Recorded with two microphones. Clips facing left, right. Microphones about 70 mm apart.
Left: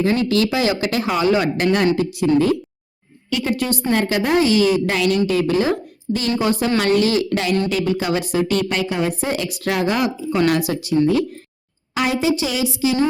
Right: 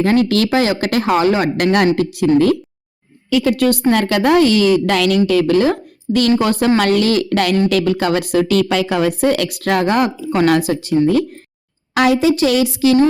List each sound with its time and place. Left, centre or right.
0.0 s speech: right
1.5 s a woman's voice: right
3.4 s a woman's voice: right
6.4 s speech: right
7.7 s speech: right
11.9 s a woman's voice: right